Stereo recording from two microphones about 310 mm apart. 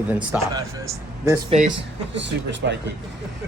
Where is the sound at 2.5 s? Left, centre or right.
Right.